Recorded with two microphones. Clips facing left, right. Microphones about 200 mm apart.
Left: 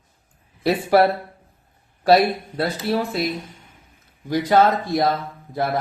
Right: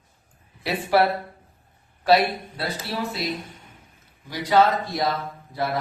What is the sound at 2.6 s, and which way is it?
Speech, 50° left (ahead or behind).